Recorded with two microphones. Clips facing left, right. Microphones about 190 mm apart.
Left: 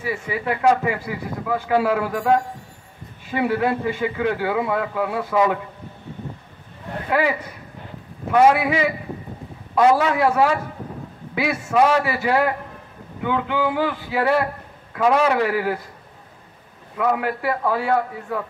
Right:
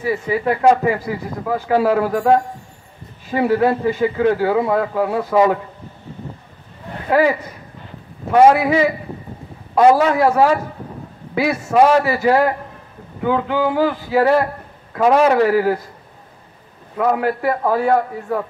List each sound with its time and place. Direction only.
0.0 s a man's voice: 40° right (ahead or behind)
7.1 s a man's voice: 40° right (ahead or behind)
16.9 s a man's voice: 40° right (ahead or behind)